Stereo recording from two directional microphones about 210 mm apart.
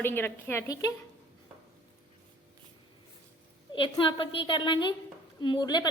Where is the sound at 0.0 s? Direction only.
10° left (ahead or behind).